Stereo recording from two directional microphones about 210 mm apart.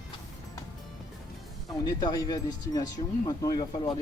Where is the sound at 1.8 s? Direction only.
20° left (ahead or behind).